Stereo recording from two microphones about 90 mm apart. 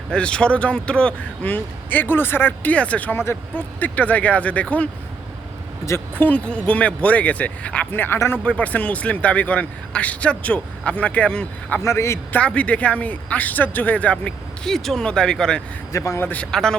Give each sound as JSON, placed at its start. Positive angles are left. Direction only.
{"t": 0.1, "sound": "speech", "side_deg": 10}
{"t": 5.8, "sound": "speech", "side_deg": 30}
{"t": 6.2, "sound": "speech", "side_deg": 15}
{"t": 11.8, "sound": "speech", "side_deg": 30}
{"t": 12.3, "sound": "speech", "side_deg": 15}
{"t": 15.9, "sound": "speech", "side_deg": 35}
{"t": 16.3, "sound": "speech", "side_deg": 10}